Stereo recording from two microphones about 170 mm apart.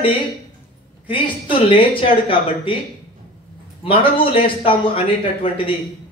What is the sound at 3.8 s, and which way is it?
A man's voice, 30° left (ahead or behind).